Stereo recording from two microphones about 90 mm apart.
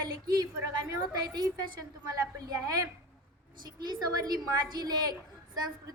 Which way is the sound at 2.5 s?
40° right (ahead or behind).